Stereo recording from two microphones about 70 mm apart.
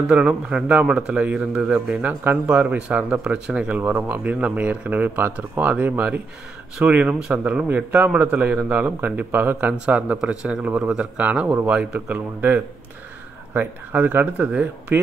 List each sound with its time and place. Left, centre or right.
0.0 s speech: centre
12.4 s speech: right